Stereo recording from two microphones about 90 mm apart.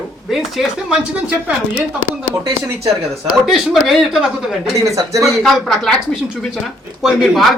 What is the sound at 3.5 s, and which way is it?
Speech, 5° right (ahead or behind).